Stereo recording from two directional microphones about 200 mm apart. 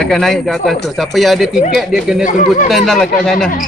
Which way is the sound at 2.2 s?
40° left (ahead or behind).